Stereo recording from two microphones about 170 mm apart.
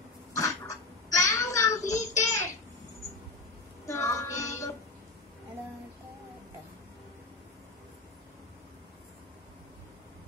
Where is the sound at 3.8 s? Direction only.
20° left (ahead or behind).